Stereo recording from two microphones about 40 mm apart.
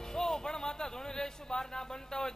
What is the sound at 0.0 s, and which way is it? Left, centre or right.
A man's voice, centre.